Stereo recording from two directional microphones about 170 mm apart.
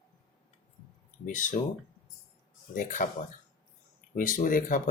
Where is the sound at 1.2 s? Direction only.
50° left (ahead or behind).